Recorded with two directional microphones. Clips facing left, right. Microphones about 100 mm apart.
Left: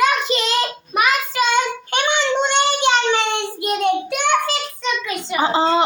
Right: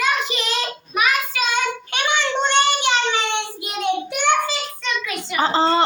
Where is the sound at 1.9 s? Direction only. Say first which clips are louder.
Left 4 dB; 25° left (ahead or behind).